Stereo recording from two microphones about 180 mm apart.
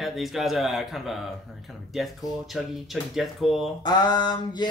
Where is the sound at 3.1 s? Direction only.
Centre (ahead or behind).